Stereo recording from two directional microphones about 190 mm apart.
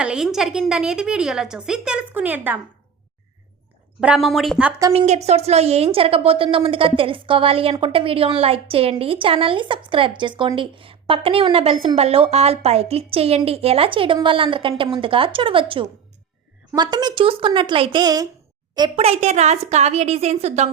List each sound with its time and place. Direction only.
0.0 s a woman's voice: 5° right (ahead or behind)
4.0 s a woman's voice: 5° right (ahead or behind)
4.9 s a woman's voice: 35° right (ahead or behind)